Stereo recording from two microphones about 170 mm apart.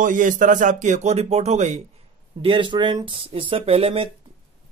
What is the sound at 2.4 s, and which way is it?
Speech, 30° right (ahead or behind).